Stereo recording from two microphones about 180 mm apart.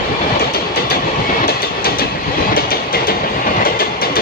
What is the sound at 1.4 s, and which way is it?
Train, 55° left (ahead or behind).